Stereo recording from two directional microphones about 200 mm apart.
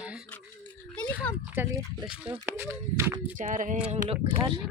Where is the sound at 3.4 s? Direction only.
40° right (ahead or behind).